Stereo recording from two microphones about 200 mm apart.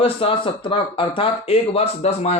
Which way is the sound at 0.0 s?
25° left (ahead or behind).